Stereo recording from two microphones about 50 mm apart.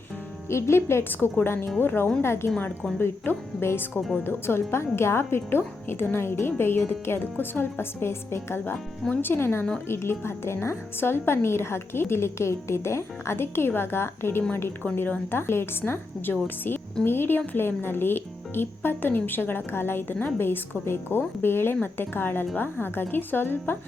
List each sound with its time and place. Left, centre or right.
0.5 s a woman's voice: left
1.8 s speech: left
2.2 s a woman's voice: left
8.6 s a woman's voice: left